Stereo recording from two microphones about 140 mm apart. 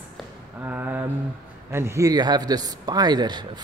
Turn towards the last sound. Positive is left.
turn(degrees=-30)  # may be behind; listen again after turning